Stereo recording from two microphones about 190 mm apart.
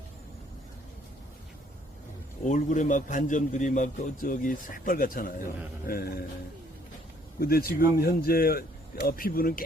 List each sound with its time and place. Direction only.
2.4 s a man's voice: 40° left (ahead or behind)
7.3 s a man's voice: 50° left (ahead or behind)